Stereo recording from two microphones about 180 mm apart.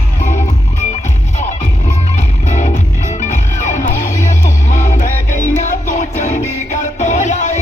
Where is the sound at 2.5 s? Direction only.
40° left (ahead or behind).